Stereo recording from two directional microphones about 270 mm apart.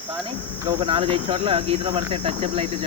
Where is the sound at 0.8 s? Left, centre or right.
Centre.